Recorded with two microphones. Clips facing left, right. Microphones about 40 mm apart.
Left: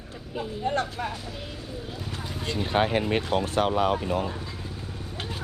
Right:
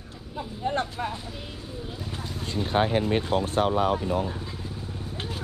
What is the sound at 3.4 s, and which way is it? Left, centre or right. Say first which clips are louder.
Speech: even; left.